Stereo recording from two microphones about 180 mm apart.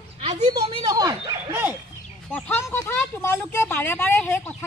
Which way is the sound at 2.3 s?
10° left (ahead or behind).